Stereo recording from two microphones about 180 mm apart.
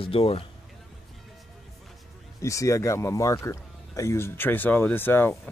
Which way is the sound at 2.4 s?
15° left (ahead or behind).